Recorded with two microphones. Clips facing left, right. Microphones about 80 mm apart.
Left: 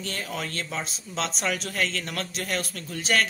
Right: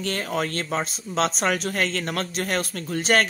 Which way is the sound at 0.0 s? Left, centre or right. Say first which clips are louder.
Right 6 dB; right.